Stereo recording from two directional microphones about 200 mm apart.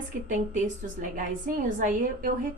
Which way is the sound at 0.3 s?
40° right (ahead or behind).